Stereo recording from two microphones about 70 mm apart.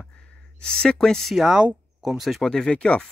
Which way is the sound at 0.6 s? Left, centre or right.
Centre.